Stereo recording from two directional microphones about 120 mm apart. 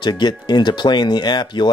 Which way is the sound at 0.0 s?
35° left (ahead or behind).